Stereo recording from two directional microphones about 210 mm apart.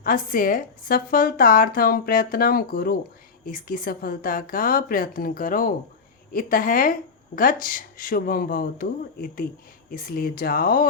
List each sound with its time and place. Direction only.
0.0 s speech: 40° left (ahead or behind)